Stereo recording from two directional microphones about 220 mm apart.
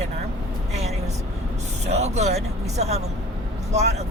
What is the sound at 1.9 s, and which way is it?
Speech, 30° right (ahead or behind).